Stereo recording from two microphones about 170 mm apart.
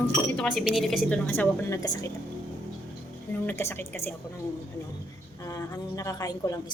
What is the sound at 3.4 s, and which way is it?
Speech, 15° left (ahead or behind).